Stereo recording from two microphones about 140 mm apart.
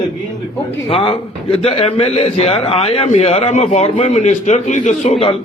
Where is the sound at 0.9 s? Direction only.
45° left (ahead or behind).